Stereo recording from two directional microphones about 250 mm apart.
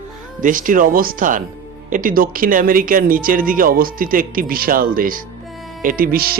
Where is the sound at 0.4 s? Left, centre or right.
Right.